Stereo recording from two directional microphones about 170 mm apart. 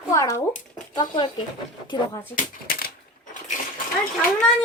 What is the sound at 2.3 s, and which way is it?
Speech, 60° left (ahead or behind).